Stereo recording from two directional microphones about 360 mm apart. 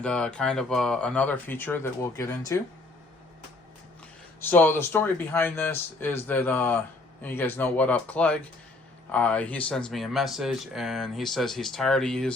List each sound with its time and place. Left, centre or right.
0.0 s speech: centre
4.4 s speech: centre